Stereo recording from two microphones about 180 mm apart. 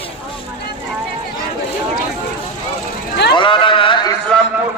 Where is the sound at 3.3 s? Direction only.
30° left (ahead or behind).